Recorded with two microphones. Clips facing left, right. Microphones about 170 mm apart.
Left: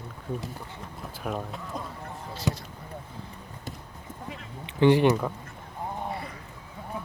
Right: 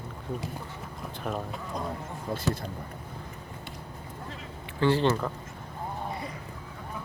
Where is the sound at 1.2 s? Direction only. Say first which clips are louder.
Left 1 dB; centre (ahead or behind).